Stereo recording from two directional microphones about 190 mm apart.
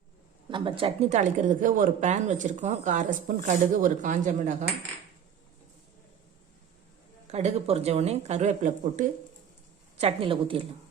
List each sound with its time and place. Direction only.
0.5 s speech: 25° right (ahead or behind)
7.3 s speech: 35° right (ahead or behind)
10.0 s a woman's voice: 30° right (ahead or behind)